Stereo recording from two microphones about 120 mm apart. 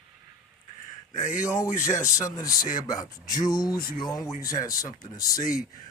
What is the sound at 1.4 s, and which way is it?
Speech, 25° left (ahead or behind).